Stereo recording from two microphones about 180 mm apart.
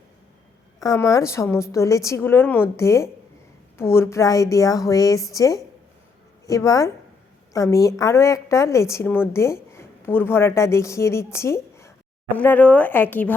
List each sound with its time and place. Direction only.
0.8 s a woman's voice: 20° left (ahead or behind)